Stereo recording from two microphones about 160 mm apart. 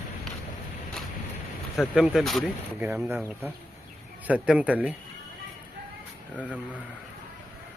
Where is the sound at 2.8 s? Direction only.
10° right (ahead or behind).